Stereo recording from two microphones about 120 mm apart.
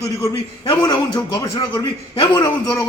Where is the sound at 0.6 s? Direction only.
40° left (ahead or behind).